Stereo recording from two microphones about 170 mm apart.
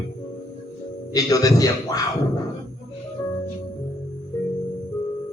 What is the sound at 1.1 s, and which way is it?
Speech, 20° left (ahead or behind).